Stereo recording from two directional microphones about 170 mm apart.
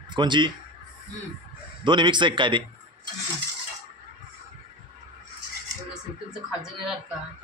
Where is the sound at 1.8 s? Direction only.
30° right (ahead or behind).